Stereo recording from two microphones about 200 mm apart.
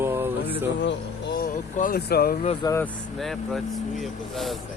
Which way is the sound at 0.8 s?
60° left (ahead or behind).